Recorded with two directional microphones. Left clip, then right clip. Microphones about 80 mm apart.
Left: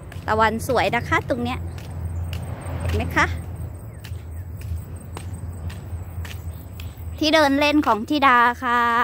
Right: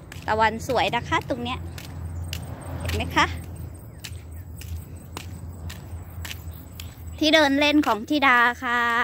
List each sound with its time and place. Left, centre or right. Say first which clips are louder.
0.4 s a woman's voice: left 2 dB; left
0.8 s speech: left 3 dB; left
2.4 s a sound: left 5 dB; left
7.2 s a woman's voice: left 1 dB; centre
8.3 s a woman's voice: left 3 dB; centre